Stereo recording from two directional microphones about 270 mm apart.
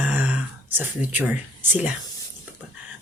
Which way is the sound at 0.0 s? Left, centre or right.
Centre.